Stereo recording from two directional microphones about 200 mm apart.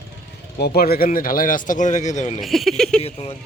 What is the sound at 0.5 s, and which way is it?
Speech, 50° left (ahead or behind).